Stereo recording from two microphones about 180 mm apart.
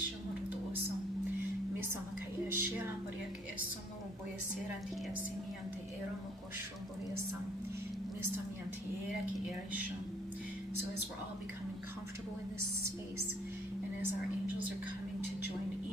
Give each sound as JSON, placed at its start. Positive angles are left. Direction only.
{"t": 2.4, "sound": "music", "side_deg": -15}